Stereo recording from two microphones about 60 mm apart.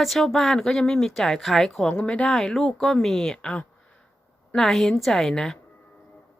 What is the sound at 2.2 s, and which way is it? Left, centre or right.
Speech, centre.